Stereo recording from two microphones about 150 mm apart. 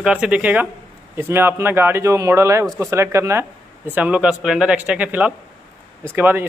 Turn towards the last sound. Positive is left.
turn(degrees=-15)  # may be behind; listen again after turning